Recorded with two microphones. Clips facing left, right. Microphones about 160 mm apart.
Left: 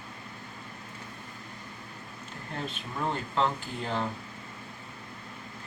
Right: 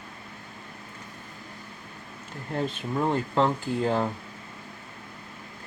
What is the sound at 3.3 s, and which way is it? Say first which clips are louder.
Speech: right 4 dB; 45° right (ahead or behind).